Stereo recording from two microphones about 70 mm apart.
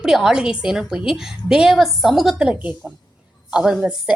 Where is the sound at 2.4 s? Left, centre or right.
Centre.